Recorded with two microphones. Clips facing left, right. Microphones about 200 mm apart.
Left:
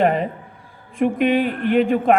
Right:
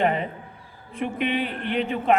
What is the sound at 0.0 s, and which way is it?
A man's voice, 40° left (ahead or behind).